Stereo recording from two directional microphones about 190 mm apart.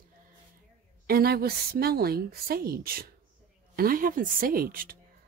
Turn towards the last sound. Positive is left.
turn(degrees=-50)  # may be behind; listen again after turning